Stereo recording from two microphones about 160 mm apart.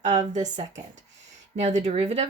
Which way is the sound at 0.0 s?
50° right (ahead or behind).